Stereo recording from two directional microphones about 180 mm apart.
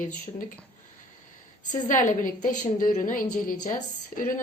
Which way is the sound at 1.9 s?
45° left (ahead or behind).